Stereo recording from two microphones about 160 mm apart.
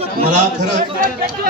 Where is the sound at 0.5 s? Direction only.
50° right (ahead or behind).